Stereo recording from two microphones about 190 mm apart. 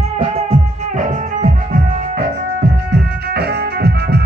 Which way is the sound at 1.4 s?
45° right (ahead or behind).